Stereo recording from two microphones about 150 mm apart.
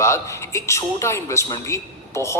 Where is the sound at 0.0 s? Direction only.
20° left (ahead or behind).